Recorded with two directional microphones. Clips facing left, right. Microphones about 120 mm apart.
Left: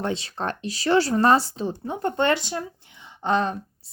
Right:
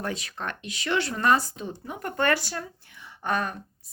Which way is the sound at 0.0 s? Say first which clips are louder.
Left 5 dB; 25° left (ahead or behind).